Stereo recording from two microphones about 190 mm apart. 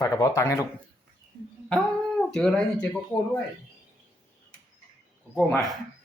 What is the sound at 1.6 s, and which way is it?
Speech, 5° left (ahead or behind).